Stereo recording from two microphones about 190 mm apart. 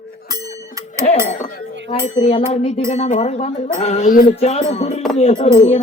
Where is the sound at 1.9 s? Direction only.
35° left (ahead or behind).